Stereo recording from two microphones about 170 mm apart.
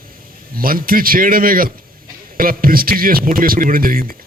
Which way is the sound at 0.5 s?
60° right (ahead or behind).